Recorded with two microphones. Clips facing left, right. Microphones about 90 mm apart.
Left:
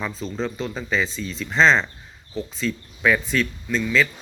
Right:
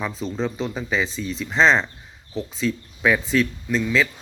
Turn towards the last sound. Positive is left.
turn(degrees=-15)  # may be behind; listen again after turning